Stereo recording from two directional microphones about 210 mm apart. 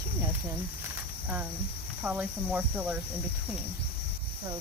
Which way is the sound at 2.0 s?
5° right (ahead or behind).